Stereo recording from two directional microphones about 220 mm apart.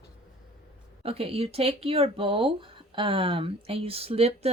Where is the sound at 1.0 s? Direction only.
25° right (ahead or behind).